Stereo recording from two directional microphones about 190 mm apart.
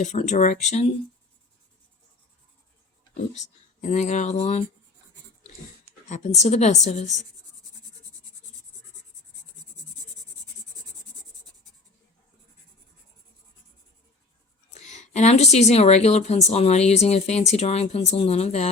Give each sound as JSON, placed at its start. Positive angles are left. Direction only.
{"t": 0.0, "sound": "a woman's voice", "side_deg": 40}
{"t": 3.3, "sound": "a woman's voice", "side_deg": 40}
{"t": 6.1, "sound": "a woman's voice", "side_deg": 35}
{"t": 14.7, "sound": "a woman's voice", "side_deg": 35}